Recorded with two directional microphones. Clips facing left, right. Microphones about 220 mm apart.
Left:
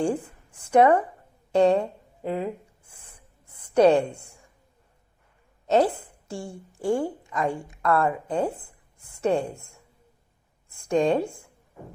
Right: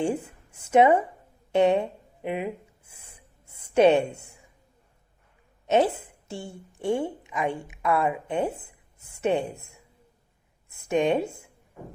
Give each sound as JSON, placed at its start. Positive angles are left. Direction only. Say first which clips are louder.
{"t": 0.0, "sound": "a sound", "louder": "left 1 dB", "side_deg": -25}
{"t": 1.5, "sound": "speech", "louder": "left 1 dB", "side_deg": -20}
{"t": 2.9, "sound": "writing", "louder": "even", "side_deg": -25}
{"t": 5.6, "sound": "a woman's voice", "louder": "left 1 dB", "side_deg": -20}
{"t": 7.3, "sound": "a woman's voice", "louder": "left 1 dB", "side_deg": -5}
{"t": 8.3, "sound": "speech", "louder": "left 1 dB", "side_deg": -25}
{"t": 10.7, "sound": "speech", "louder": "left 1 dB", "side_deg": -20}